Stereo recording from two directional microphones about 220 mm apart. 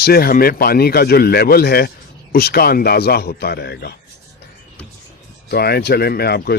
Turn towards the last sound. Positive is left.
turn(degrees=45)  # may be behind; listen again after turning